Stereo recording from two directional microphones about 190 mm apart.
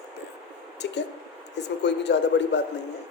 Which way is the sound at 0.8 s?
65° left (ahead or behind).